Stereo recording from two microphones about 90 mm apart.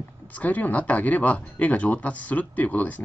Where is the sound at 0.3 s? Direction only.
20° left (ahead or behind).